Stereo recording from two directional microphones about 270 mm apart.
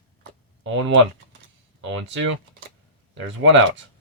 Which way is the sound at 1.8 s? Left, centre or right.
Right.